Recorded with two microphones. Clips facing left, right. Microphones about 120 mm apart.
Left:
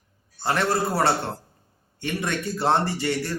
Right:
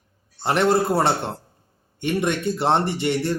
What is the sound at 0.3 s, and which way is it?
A man's voice, 20° right (ahead or behind).